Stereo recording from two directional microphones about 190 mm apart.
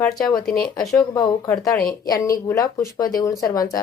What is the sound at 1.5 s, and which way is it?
A woman's voice, 15° left (ahead or behind).